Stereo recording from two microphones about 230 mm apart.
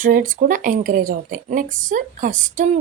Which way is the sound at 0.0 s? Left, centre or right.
Right.